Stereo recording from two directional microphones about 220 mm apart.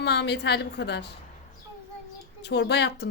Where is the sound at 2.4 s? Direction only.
50° left (ahead or behind).